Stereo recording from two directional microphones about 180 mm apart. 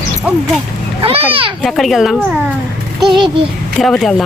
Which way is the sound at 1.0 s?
30° right (ahead or behind).